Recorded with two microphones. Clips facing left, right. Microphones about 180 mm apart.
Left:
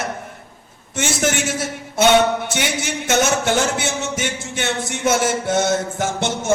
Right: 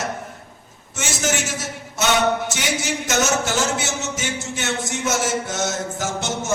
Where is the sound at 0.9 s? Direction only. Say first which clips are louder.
Left 4 dB; 60° left (ahead or behind).